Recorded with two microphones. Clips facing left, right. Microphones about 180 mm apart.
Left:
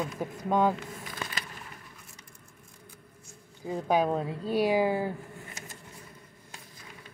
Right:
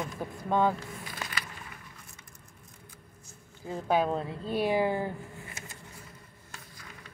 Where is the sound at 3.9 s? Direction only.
10° left (ahead or behind).